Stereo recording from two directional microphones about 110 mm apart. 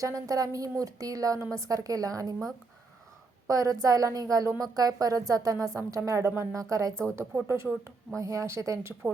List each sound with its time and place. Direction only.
0.0 s a woman's voice: 30° right (ahead or behind)
3.4 s a woman's voice: 30° right (ahead or behind)